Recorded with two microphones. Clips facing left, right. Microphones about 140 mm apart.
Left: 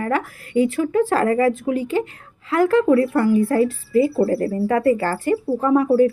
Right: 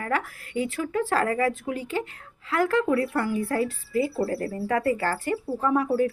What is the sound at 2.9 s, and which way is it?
Speech, 40° left (ahead or behind).